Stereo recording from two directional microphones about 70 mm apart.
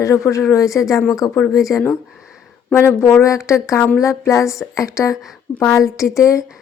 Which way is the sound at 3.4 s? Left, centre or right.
Left.